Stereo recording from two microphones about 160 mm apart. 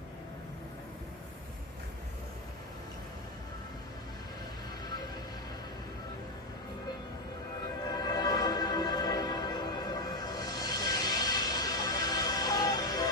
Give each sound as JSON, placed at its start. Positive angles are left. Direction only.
{"t": 7.9, "sound": "music", "side_deg": 25}